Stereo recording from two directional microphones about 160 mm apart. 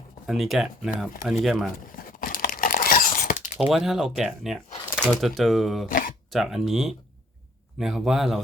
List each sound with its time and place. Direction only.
0.3 s speech: centre (ahead or behind)
1.9 s crumpling: 60° left (ahead or behind)
3.7 s speech: centre (ahead or behind)
5.9 s a sound: 60° left (ahead or behind)
6.3 s speech: centre (ahead or behind)